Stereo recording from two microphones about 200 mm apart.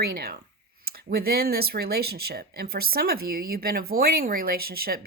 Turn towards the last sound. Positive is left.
turn(degrees=-50)  # may be behind; listen again after turning